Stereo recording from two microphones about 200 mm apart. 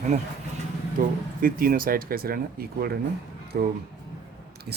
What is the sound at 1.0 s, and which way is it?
A man's voice, 45° right (ahead or behind).